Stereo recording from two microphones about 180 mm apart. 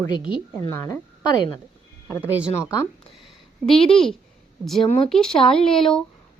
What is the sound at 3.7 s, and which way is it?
Speech, 30° left (ahead or behind).